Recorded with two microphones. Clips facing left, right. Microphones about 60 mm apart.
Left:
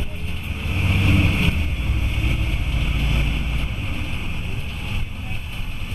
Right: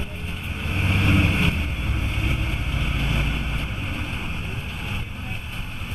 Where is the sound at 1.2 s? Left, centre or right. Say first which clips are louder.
Even; centre.